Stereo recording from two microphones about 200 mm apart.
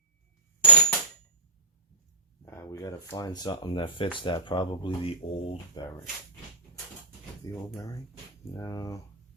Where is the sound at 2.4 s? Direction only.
15° left (ahead or behind).